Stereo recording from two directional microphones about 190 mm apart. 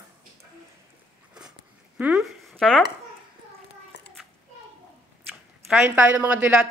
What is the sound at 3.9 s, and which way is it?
Children playing, 65° left (ahead or behind).